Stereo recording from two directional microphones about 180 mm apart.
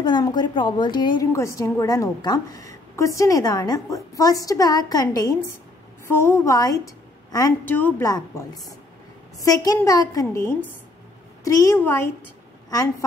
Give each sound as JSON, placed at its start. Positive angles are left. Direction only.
{"t": 0.0, "sound": "a woman's voice", "side_deg": 25}